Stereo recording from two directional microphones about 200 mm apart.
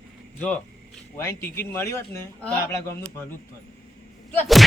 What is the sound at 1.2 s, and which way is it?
A man's voice, 15° left (ahead or behind).